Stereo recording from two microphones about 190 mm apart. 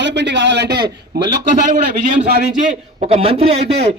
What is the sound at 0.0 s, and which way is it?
A man's voice, 65° right (ahead or behind).